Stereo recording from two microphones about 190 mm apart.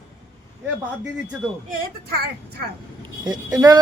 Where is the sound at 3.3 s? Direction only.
20° right (ahead or behind).